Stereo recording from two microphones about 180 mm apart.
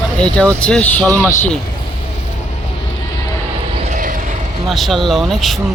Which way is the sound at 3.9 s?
50° right (ahead or behind).